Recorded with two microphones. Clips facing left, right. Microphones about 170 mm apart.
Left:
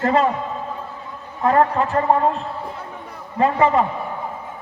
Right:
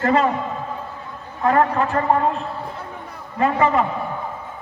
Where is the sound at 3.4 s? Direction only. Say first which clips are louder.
Left 1 dB; 25° left (ahead or behind).